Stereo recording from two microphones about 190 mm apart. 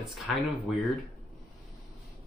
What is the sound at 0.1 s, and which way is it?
Speech, centre (ahead or behind).